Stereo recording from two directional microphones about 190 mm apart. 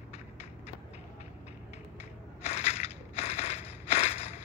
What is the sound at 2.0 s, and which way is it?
Crushing, 35° left (ahead or behind).